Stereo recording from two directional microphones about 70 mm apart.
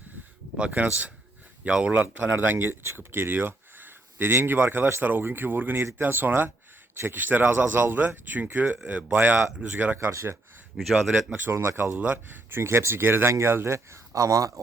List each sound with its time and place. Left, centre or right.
0.5 s speech: centre
2.3 s speech: right
9.1 s speech: right
10.1 s speech: right
10.8 s speech: centre
11.3 s speech: right
11.9 s speech: right